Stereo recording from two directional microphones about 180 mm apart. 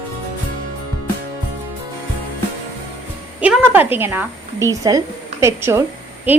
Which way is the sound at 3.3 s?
5° right (ahead or behind).